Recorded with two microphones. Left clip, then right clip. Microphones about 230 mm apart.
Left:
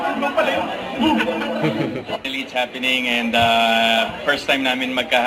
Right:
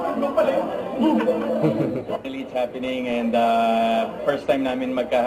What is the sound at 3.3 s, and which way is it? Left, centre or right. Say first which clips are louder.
A man's voice: left 3 dB; centre.